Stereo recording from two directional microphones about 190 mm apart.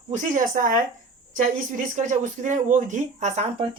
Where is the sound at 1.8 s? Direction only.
40° right (ahead or behind).